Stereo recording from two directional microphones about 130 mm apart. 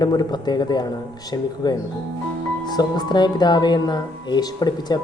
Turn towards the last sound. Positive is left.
turn(degrees=30)  # may be behind; listen again after turning